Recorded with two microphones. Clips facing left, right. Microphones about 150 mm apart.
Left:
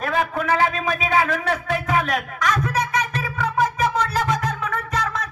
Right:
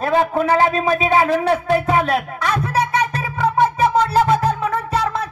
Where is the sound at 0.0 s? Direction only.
30° right (ahead or behind).